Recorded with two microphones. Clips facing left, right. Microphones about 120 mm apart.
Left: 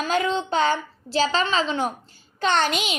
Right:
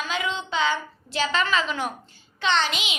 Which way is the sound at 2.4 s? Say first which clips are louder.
Left 3 dB; 50° left (ahead or behind).